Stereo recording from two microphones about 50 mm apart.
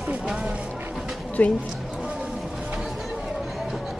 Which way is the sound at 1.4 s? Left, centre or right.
Left.